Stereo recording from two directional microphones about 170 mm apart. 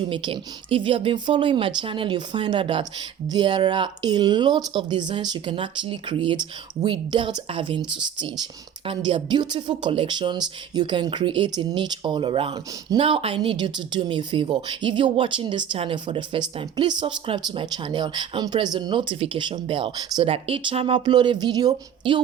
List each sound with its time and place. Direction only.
0.0 s speech: 30° right (ahead or behind)